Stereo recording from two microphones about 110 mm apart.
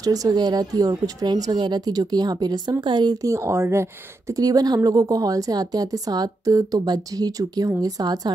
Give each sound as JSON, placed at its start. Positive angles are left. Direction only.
{"t": 0.0, "sound": "a woman's voice", "side_deg": -35}
{"t": 3.3, "sound": "speech", "side_deg": -25}
{"t": 4.4, "sound": "a woman's voice", "side_deg": -35}